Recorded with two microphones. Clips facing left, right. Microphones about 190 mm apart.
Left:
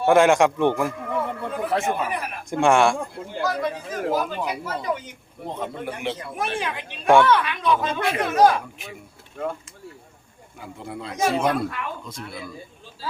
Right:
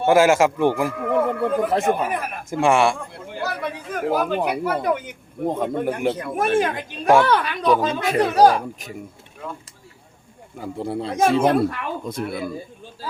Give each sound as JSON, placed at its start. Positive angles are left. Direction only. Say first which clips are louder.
{"t": 0.0, "sound": "a man's voice", "louder": "right 1 dB", "side_deg": -5}
{"t": 0.9, "sound": "a sound", "louder": "right 7 dB", "side_deg": -55}
{"t": 1.7, "sound": "speech", "louder": "right 4 dB", "side_deg": -40}
{"t": 2.5, "sound": "a man's voice", "louder": "even", "side_deg": -5}
{"t": 3.4, "sound": "speech", "louder": "left 2 dB", "side_deg": -60}
{"t": 10.6, "sound": "speech", "louder": "right 8 dB", "side_deg": -35}
{"t": 11.7, "sound": "speech", "louder": "right 5 dB", "side_deg": -55}